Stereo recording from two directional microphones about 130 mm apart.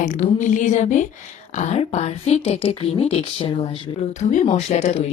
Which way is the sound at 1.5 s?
60° left (ahead or behind).